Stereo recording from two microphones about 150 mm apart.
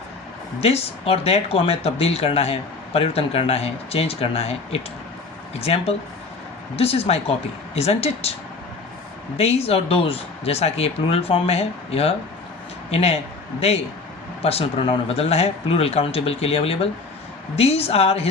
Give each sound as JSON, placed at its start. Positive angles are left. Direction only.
{"t": 0.6, "sound": "speech", "side_deg": 40}
{"t": 9.4, "sound": "speech", "side_deg": 45}